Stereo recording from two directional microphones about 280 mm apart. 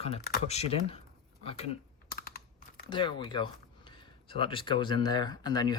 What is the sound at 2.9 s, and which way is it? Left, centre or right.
Speech, centre.